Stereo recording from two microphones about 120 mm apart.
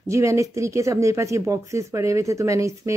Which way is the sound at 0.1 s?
25° right (ahead or behind).